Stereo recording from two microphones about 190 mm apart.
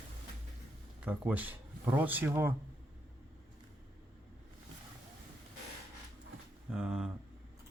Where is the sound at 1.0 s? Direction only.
10° right (ahead or behind).